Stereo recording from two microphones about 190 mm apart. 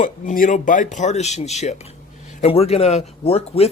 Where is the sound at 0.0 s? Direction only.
45° left (ahead or behind).